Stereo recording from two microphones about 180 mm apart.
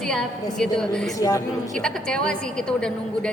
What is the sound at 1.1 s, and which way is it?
Speech, 20° left (ahead or behind).